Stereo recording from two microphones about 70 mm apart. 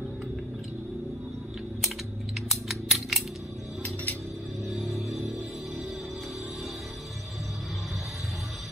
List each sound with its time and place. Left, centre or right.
2.7 s a sound: centre
3.8 s music: left
4.6 s music: centre